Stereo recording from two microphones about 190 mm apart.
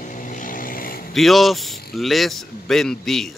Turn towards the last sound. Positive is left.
turn(degrees=0)  # may be behind; listen again after turning